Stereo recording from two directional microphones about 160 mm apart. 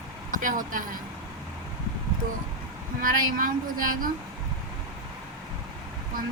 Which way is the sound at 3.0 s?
60° right (ahead or behind).